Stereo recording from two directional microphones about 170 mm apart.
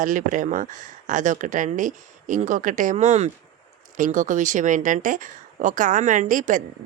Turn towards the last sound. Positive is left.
turn(degrees=-50)  # may be behind; listen again after turning